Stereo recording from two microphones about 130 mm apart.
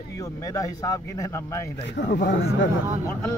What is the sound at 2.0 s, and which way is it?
Speech, 90° left.